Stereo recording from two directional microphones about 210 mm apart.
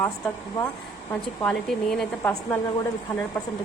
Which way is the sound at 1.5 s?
5° left (ahead or behind).